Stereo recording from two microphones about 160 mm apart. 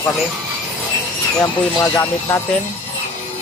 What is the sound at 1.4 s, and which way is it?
Speech, 20° left (ahead or behind).